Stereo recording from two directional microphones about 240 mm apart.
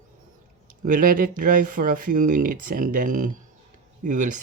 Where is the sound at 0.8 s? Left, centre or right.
Right.